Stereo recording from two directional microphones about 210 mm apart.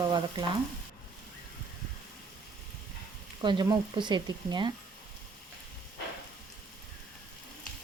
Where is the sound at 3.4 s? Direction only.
20° right (ahead or behind).